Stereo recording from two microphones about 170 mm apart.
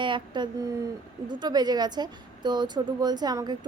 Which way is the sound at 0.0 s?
30° right (ahead or behind).